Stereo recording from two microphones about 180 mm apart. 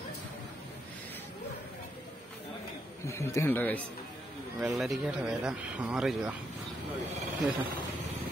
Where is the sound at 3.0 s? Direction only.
15° left (ahead or behind).